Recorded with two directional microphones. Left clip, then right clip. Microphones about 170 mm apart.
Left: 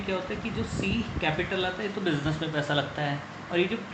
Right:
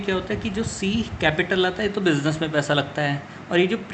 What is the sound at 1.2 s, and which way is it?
Speech, 70° right (ahead or behind).